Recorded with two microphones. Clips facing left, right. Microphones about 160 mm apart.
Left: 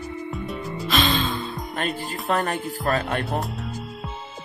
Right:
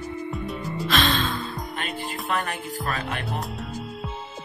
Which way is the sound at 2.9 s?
45° left (ahead or behind).